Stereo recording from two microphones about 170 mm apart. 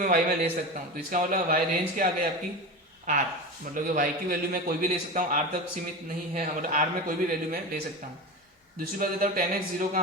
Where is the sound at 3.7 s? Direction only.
50° right (ahead or behind).